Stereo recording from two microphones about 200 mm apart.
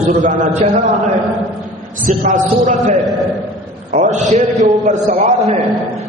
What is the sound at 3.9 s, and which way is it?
A man's voice, 40° right (ahead or behind).